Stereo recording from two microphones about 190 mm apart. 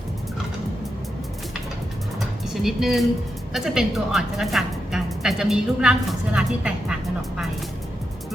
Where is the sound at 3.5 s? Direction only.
Centre (ahead or behind).